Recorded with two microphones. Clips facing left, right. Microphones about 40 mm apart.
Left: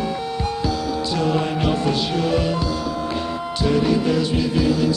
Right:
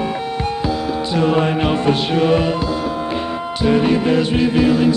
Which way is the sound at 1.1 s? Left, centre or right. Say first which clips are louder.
Right 6 dB; right.